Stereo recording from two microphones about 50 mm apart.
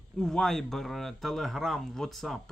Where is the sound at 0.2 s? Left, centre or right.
Centre.